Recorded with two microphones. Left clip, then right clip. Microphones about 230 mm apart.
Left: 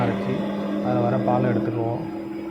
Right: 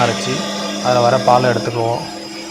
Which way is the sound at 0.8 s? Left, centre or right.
Centre.